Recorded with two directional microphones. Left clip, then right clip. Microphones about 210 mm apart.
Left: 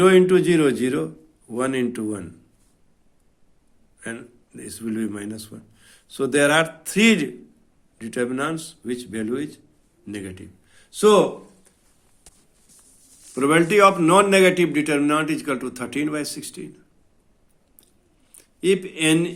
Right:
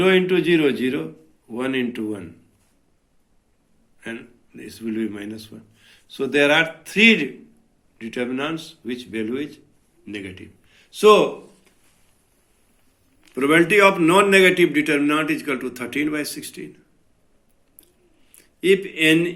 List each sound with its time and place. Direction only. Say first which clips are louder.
0.0 s a man's voice: left 2 dB; 55° left (ahead or behind)
4.0 s a man's voice: even; 55° left (ahead or behind)
13.3 s a man's voice: right 1 dB; 40° left (ahead or behind)
18.3 s a man's voice: right 3 dB; 45° left (ahead or behind)